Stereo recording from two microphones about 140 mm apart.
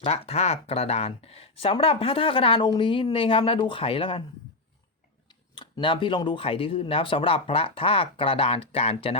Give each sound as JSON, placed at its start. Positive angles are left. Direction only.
{"t": 0.0, "sound": "speech", "side_deg": 45}
{"t": 5.3, "sound": "speech", "side_deg": 30}